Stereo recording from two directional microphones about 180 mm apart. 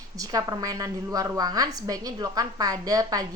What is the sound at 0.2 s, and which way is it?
A woman's voice, 20° right (ahead or behind).